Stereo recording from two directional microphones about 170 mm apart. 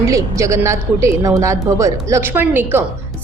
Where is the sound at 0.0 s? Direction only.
20° right (ahead or behind).